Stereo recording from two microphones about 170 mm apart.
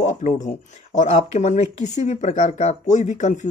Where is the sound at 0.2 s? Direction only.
45° left (ahead or behind).